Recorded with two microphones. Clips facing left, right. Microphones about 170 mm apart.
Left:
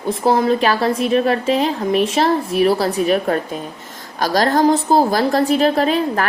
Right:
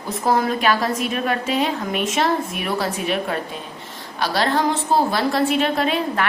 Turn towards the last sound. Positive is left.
turn(degrees=35)  # may be behind; listen again after turning